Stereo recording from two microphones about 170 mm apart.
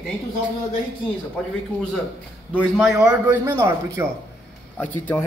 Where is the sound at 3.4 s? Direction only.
15° right (ahead or behind).